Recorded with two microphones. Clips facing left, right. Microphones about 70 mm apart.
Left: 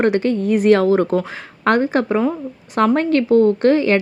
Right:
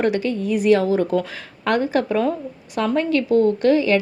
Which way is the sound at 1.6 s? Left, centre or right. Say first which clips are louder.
Left 3 dB; left.